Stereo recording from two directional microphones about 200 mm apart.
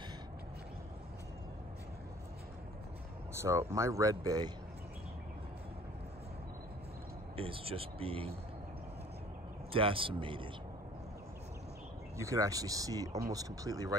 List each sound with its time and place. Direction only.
3.3 s speech: 15° right (ahead or behind)
7.3 s speech: 25° right (ahead or behind)
9.7 s speech: 25° right (ahead or behind)
12.2 s speech: 15° right (ahead or behind)